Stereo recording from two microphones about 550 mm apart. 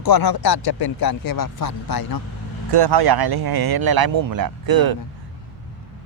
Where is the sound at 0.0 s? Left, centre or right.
Left.